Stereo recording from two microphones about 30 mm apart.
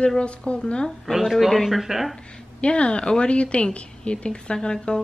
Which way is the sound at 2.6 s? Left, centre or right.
Left.